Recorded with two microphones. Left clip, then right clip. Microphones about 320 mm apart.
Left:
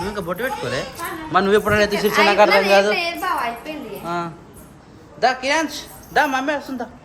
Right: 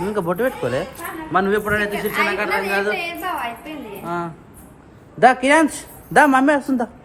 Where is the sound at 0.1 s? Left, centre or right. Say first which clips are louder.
Right 3 dB; centre.